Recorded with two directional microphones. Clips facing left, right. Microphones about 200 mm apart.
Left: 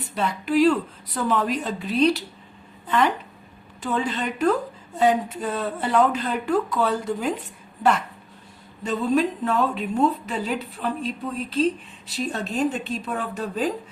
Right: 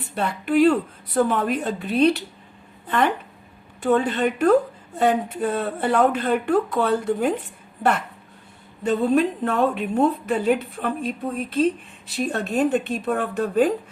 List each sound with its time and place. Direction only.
0.1 s a woman's voice: 55° right (ahead or behind)